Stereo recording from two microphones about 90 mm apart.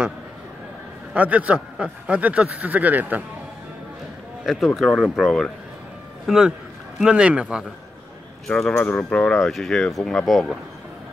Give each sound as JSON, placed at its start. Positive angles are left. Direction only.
{"t": 1.1, "sound": "a man's voice", "side_deg": -15}
{"t": 4.5, "sound": "a man's voice", "side_deg": -5}
{"t": 8.5, "sound": "speech", "side_deg": 10}